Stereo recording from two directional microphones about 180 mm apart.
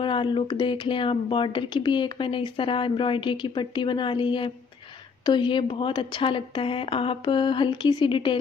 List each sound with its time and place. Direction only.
0.0 s speech: 25° left (ahead or behind)